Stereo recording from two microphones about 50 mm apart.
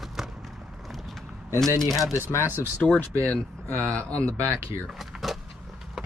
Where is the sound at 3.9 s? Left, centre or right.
Left.